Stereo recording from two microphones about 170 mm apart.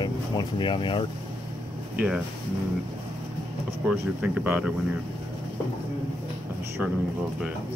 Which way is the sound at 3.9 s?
5° right (ahead or behind).